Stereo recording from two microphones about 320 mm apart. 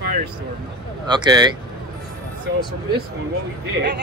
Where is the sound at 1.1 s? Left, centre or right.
Centre.